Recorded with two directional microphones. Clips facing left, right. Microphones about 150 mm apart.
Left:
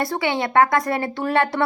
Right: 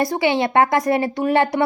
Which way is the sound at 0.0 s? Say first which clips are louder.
Right 4 dB; 20° right (ahead or behind).